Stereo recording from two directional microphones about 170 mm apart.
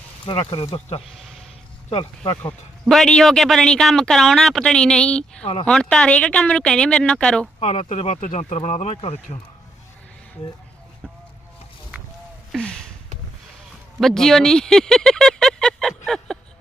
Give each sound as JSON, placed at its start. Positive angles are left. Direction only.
{"t": 0.3, "sound": "speech", "side_deg": 30}
{"t": 1.1, "sound": "a sound", "side_deg": 0}
{"t": 1.9, "sound": "speech", "side_deg": 35}
{"t": 2.8, "sound": "speech", "side_deg": 0}
{"t": 7.6, "sound": "speech", "side_deg": 35}
{"t": 12.5, "sound": "a sound", "side_deg": 5}
{"t": 14.0, "sound": "speech", "side_deg": 0}